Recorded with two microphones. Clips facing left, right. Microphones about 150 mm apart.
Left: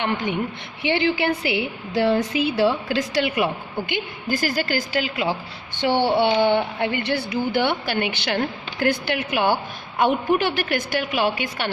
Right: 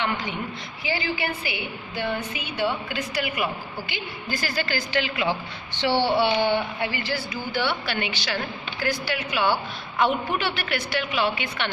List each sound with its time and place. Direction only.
0.0 s a woman's voice: 55° left (ahead or behind)
0.8 s a woman's voice: 70° left (ahead or behind); by 3.4 s 90° left
3.8 s a woman's voice: 55° left (ahead or behind)
6.4 s a woman's voice: 55° left (ahead or behind)